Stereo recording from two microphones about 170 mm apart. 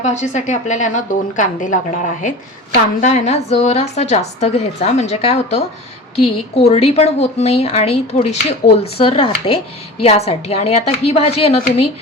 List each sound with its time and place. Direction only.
0.0 s a woman's voice: 45° left (ahead or behind)